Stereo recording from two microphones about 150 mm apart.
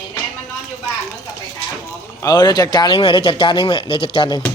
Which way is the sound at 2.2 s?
30° left (ahead or behind).